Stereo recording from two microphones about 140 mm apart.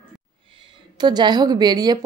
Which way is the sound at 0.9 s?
30° right (ahead or behind).